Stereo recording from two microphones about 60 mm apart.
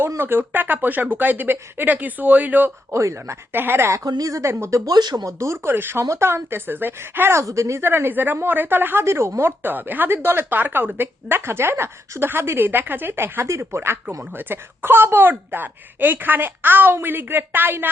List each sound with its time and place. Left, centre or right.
0.2 s speech: right
2.9 s speech: right
3.5 s speech: right
4.0 s speech: right
4.9 s speech: right
5.6 s speech: right
6.0 s speech: right
7.4 s speech: right
9.0 s speech: right
9.4 s speech: right